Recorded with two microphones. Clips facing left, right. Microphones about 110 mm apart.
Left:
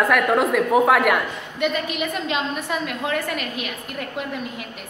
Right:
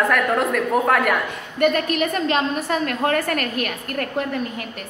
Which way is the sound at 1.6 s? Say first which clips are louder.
Right 5 dB; 55° right (ahead or behind).